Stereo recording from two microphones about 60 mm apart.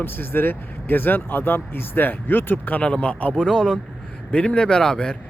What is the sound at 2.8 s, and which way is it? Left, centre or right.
Speech, centre.